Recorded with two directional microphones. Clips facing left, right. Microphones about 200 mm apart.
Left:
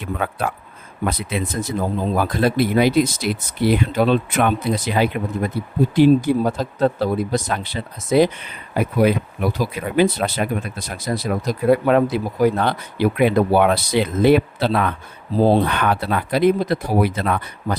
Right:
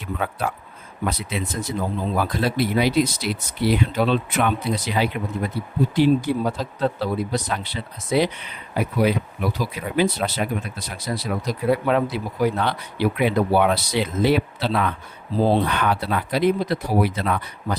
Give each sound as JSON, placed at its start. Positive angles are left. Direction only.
{"t": 0.0, "sound": "speech", "side_deg": 55}
{"t": 1.8, "sound": "speech", "side_deg": 50}